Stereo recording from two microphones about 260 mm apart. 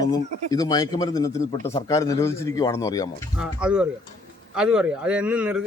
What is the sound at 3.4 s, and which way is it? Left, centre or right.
Speech, centre.